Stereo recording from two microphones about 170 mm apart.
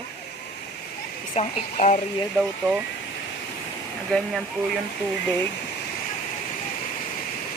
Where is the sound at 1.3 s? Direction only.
35° left (ahead or behind).